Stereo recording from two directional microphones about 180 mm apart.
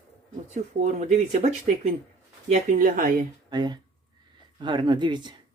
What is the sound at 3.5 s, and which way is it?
Speech, 25° right (ahead or behind).